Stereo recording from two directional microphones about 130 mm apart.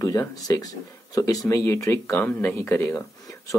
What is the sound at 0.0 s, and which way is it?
Speech, 25° left (ahead or behind).